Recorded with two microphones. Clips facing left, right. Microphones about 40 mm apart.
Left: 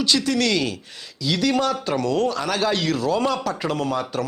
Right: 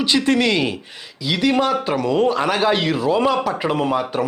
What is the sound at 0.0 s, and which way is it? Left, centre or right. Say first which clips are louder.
A man's voice: right 4 dB; right.